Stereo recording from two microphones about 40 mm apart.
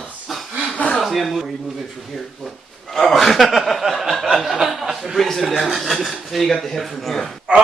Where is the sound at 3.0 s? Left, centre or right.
Centre.